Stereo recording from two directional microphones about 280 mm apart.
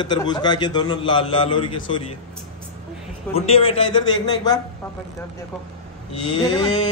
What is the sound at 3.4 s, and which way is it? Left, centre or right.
A man's voice, centre.